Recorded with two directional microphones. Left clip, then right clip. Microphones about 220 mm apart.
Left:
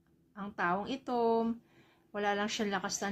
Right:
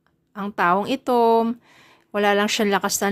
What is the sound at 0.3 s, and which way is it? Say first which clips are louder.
A woman's voice: right 14 dB; 45° right (ahead or behind).